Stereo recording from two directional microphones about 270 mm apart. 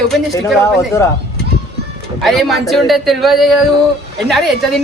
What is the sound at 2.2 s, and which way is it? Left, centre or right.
Speech, centre.